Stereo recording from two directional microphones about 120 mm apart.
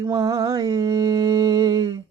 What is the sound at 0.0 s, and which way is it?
Mantra, 30° right (ahead or behind).